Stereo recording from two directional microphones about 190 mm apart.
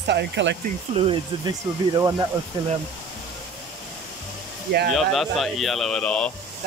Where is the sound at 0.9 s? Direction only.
30° right (ahead or behind).